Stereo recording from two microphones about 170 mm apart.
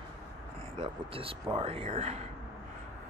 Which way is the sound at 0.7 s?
35° right (ahead or behind).